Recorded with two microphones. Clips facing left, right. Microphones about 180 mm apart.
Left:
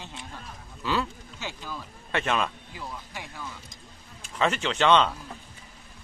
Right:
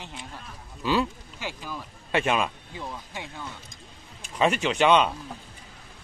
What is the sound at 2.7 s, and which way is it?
A man's voice, 25° right (ahead or behind).